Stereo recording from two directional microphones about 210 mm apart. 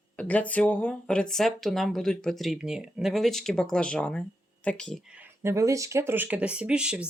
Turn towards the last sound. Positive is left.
turn(degrees=-5)  # may be behind; listen again after turning